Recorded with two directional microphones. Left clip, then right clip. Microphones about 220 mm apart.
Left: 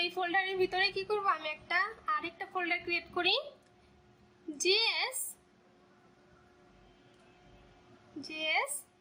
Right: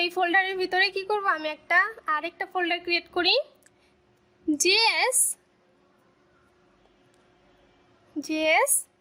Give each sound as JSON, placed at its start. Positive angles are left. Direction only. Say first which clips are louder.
{"t": 0.0, "sound": "a woman's voice", "louder": "right 8 dB", "side_deg": -40}
{"t": 4.5, "sound": "a woman's voice", "louder": "right 8 dB", "side_deg": -45}
{"t": 8.3, "sound": "a woman's voice", "louder": "right 10 dB", "side_deg": -45}